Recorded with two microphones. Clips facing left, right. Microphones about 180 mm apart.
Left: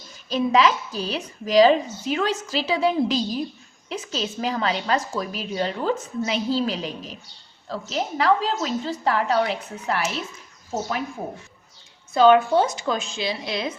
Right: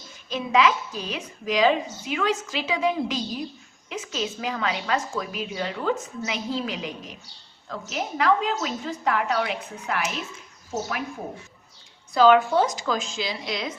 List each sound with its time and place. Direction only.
0.3 s a woman's voice: 35° left (ahead or behind)
12.1 s a woman's voice: 25° left (ahead or behind)